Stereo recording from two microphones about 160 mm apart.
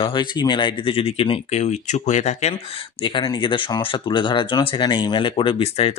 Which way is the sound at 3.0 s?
30° left (ahead or behind).